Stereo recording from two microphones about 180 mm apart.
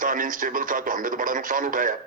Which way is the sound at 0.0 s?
50° right (ahead or behind).